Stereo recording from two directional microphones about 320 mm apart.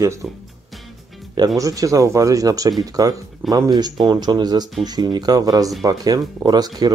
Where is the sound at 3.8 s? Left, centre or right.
Centre.